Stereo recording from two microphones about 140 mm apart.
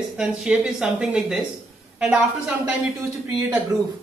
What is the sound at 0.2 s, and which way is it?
A woman's voice, 5° right (ahead or behind).